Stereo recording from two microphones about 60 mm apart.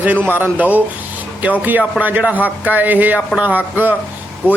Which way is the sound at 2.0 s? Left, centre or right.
Right.